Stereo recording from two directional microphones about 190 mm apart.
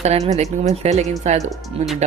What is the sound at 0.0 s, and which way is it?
Speech, 35° right (ahead or behind).